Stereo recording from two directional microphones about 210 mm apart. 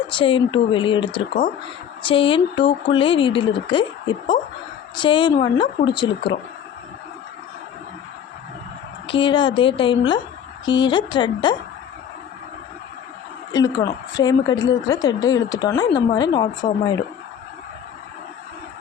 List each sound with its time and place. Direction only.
0.1 s a woman's voice: 25° left (ahead or behind)
9.0 s a woman's voice: 25° left (ahead or behind)
13.5 s a woman's voice: 20° left (ahead or behind)